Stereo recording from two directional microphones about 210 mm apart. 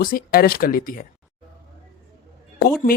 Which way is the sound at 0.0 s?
45° left (ahead or behind).